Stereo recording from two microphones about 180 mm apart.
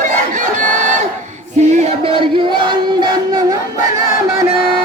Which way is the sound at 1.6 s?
40° right (ahead or behind).